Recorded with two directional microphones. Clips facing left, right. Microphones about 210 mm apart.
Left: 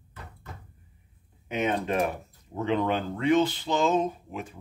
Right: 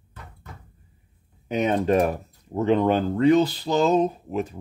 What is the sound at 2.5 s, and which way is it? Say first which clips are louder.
Speech: right 6 dB; 40° right (ahead or behind).